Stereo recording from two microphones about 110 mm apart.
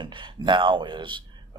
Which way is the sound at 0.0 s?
45° right (ahead or behind).